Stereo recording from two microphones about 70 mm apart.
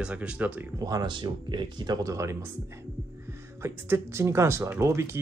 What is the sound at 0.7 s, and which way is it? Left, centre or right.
Speech, right.